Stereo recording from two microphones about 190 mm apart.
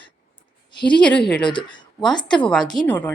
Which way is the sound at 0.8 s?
25° left (ahead or behind).